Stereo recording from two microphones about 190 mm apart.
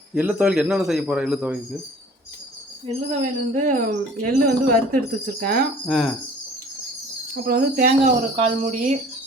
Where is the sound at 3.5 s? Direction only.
40° right (ahead or behind).